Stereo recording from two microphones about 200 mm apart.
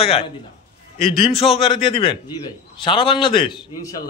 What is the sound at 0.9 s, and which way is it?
A man's voice, 25° left (ahead or behind).